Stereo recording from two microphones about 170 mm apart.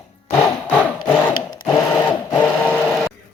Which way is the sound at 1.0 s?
25° left (ahead or behind).